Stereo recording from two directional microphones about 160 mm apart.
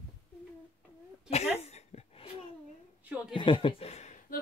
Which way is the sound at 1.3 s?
40° left (ahead or behind).